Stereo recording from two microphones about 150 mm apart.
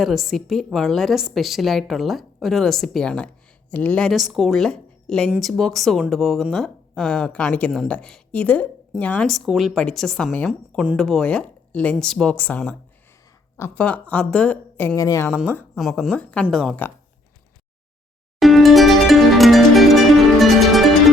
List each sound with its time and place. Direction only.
0.0 s a woman's voice: centre (ahead or behind)
14.9 s a woman's voice: 20° left (ahead or behind)
15.8 s a woman's voice: centre (ahead or behind)
18.3 s music: centre (ahead or behind)